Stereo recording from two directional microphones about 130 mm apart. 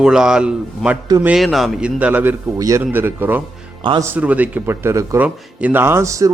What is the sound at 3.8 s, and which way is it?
Speech, 40° right (ahead or behind).